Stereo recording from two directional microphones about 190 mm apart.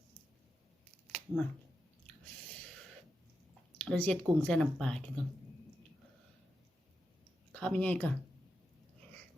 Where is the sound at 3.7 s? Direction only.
10° left (ahead or behind).